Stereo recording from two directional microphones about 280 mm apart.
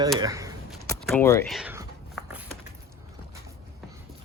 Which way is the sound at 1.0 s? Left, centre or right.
Centre.